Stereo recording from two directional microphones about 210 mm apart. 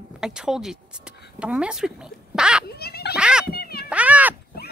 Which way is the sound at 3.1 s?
5° right (ahead or behind).